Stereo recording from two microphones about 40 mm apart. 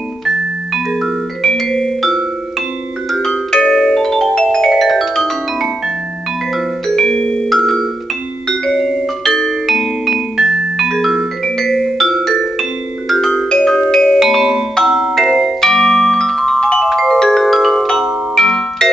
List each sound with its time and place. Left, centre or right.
1.4 s music: centre
6.9 s music: centre
9.7 s music: centre
10.3 s music: centre
11.4 s music: centre
14.2 s music: centre
14.8 s marimba: centre
18.3 s music: centre